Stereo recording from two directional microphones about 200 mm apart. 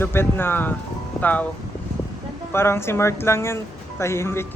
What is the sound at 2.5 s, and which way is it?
Speech, 10° left (ahead or behind).